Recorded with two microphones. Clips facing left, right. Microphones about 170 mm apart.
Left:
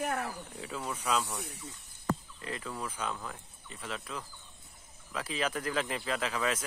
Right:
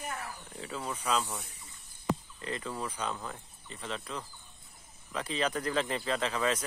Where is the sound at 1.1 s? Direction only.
5° left (ahead or behind).